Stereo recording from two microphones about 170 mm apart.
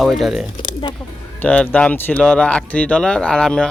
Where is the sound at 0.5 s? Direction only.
30° left (ahead or behind).